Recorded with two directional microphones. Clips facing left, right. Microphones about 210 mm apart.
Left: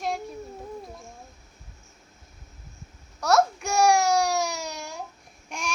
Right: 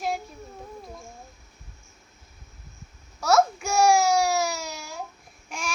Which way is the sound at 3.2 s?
Centre (ahead or behind).